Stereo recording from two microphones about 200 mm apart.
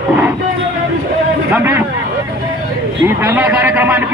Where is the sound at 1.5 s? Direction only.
10° right (ahead or behind).